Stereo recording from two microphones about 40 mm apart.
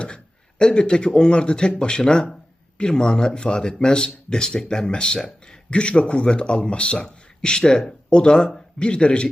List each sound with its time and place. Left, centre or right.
0.6 s speech: left